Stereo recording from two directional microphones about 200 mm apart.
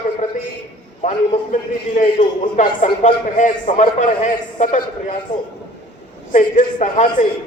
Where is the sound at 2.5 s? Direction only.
35° left (ahead or behind).